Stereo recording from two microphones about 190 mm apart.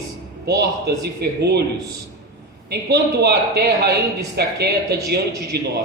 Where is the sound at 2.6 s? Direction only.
60° right (ahead or behind).